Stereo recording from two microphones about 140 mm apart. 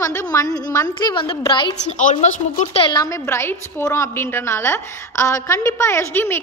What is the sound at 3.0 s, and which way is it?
A woman's voice, 20° left (ahead or behind).